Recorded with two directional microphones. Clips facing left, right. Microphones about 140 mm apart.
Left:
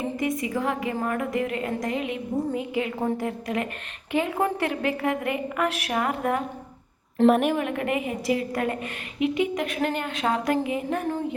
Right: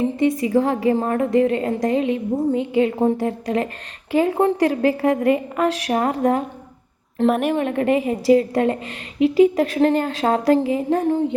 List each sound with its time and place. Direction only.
0.2 s a woman's voice: 30° right (ahead or behind)
7.2 s a woman's voice: centre (ahead or behind)
7.5 s a woman's voice: 35° right (ahead or behind)